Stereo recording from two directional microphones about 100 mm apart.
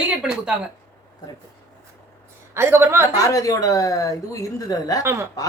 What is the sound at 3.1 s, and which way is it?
A woman's voice, 35° left (ahead or behind).